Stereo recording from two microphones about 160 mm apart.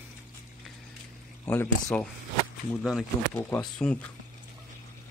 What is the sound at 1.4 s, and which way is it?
Speech, 10° left (ahead or behind).